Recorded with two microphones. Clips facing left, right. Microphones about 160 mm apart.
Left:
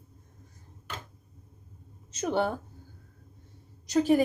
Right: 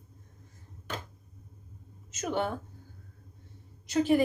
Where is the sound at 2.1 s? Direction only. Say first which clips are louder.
Left 3 dB; 30° left (ahead or behind).